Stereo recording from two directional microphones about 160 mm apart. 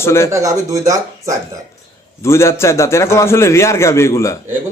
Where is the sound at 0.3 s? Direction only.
20° right (ahead or behind).